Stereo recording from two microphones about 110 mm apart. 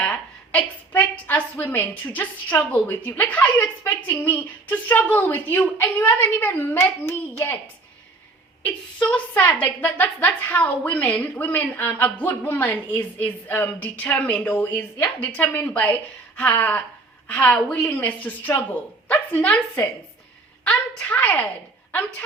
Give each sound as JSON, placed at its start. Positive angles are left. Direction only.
{"t": 0.0, "sound": "a woman's voice", "side_deg": 15}
{"t": 8.6, "sound": "a woman's voice", "side_deg": 10}